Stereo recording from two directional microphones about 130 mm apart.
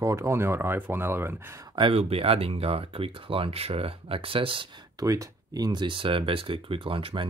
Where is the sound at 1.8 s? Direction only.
45° right (ahead or behind).